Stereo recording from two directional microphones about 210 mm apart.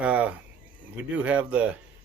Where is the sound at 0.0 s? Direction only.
5° right (ahead or behind).